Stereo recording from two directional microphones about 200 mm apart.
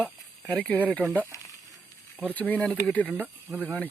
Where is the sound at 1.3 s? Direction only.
15° left (ahead or behind).